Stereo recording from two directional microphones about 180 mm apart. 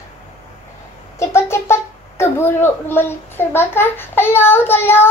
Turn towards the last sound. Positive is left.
turn(degrees=10)  # may be behind; listen again after turning